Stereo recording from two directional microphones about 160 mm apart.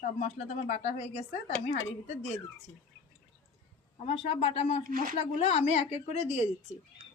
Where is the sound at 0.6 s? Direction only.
50° left (ahead or behind).